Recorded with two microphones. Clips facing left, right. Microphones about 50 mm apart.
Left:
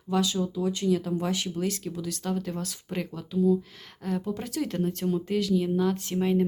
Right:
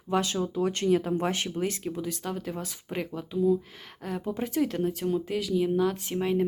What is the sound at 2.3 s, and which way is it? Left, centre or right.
Speech, centre.